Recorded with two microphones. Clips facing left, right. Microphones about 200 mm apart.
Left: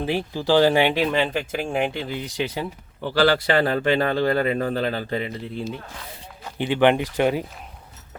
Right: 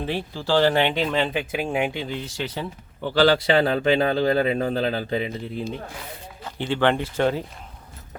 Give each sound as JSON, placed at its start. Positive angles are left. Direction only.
{"t": 0.0, "sound": "speech", "side_deg": 10}
{"t": 3.1, "sound": "speech", "side_deg": -10}
{"t": 3.7, "sound": "a man's voice", "side_deg": 0}
{"t": 6.6, "sound": "speech", "side_deg": 15}